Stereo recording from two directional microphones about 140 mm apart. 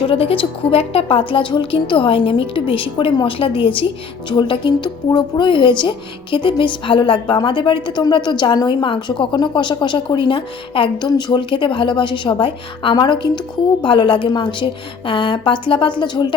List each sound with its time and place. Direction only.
0.1 s speech: 40° left (ahead or behind)